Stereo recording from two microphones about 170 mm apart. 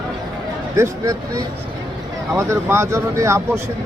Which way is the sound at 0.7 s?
20° right (ahead or behind).